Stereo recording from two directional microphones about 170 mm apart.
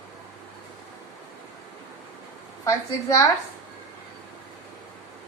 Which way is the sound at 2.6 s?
20° left (ahead or behind).